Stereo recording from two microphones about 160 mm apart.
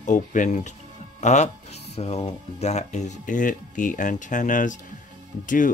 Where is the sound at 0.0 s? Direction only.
50° left (ahead or behind).